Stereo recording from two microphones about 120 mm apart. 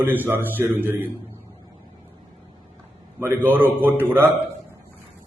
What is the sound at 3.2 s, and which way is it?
A man's voice, 20° right (ahead or behind).